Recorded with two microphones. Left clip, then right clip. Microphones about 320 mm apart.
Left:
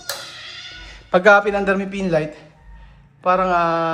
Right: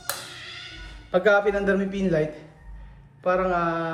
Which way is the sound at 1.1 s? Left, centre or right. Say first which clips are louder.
Left 7 dB; centre.